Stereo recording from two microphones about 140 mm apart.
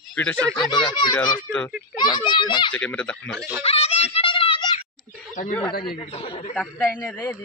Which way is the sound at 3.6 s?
45° left (ahead or behind).